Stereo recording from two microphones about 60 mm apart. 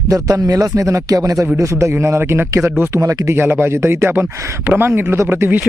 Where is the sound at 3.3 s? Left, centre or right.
Right.